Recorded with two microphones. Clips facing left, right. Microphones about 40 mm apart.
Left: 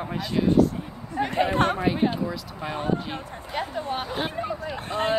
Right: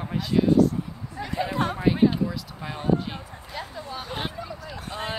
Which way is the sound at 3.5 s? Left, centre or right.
Left.